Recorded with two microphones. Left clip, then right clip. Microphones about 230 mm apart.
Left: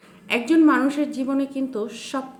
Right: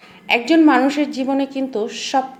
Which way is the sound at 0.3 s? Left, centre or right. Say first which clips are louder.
Right 4 dB; centre.